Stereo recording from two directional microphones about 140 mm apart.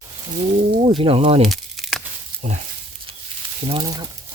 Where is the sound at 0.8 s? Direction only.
40° right (ahead or behind).